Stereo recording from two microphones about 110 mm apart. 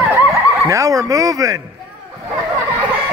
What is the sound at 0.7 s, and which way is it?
Speech, 30° right (ahead or behind).